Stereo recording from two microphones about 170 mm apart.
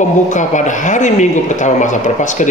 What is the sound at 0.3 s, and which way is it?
Speech, 45° left (ahead or behind).